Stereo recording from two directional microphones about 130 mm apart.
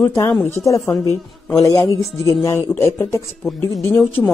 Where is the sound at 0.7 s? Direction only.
25° left (ahead or behind).